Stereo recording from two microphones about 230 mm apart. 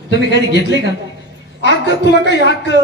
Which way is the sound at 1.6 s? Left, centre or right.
Left.